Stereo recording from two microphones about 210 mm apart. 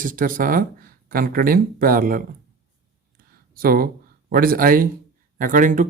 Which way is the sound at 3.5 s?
45° right (ahead or behind).